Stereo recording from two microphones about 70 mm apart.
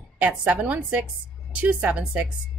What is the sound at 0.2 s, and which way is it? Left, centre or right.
A woman's voice, right.